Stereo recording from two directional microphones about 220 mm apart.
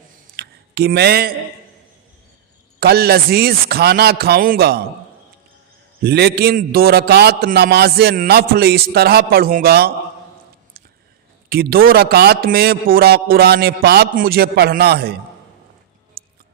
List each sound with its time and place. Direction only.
0.3 s a sound: 45° right (ahead or behind)
2.8 s a man's voice: 45° right (ahead or behind)
6.0 s a man's voice: 45° right (ahead or behind)
11.4 s a man's voice: 45° right (ahead or behind)